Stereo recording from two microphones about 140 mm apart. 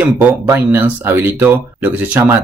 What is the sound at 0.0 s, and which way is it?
Speech, 15° right (ahead or behind).